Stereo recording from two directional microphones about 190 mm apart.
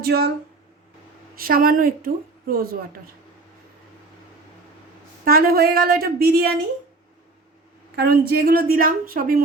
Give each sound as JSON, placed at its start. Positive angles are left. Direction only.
{"t": 0.0, "sound": "speech", "side_deg": -55}
{"t": 1.4, "sound": "a woman's voice", "side_deg": -50}
{"t": 5.2, "sound": "a woman's voice", "side_deg": -50}
{"t": 7.9, "sound": "a woman's voice", "side_deg": -55}